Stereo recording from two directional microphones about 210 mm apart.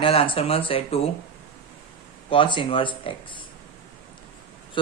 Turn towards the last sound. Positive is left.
turn(degrees=25)  # may be behind; listen again after turning